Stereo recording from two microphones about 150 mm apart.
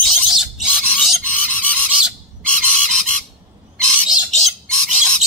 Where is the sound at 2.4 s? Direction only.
5° left (ahead or behind).